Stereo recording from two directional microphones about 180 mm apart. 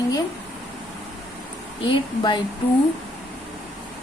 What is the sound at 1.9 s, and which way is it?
Speech, 25° left (ahead or behind).